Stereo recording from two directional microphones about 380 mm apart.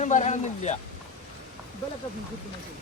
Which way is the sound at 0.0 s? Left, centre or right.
Centre.